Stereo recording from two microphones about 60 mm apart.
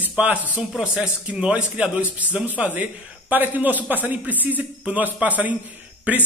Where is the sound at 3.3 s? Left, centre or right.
Right.